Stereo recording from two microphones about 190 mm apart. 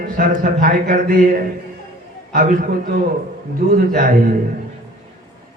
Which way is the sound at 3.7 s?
50° right (ahead or behind).